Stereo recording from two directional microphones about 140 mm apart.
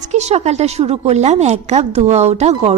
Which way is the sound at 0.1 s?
50° right (ahead or behind).